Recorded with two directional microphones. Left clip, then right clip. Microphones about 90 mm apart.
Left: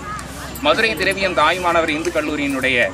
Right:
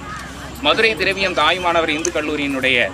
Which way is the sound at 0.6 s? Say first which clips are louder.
Right 1 dB; 5° left (ahead or behind).